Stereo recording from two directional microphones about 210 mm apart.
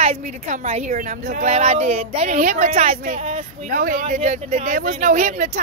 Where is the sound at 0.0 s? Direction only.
30° right (ahead or behind).